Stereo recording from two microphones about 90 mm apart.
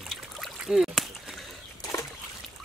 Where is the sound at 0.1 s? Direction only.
Centre (ahead or behind).